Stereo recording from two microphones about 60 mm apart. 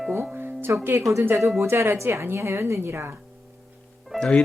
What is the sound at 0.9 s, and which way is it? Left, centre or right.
Speech, right.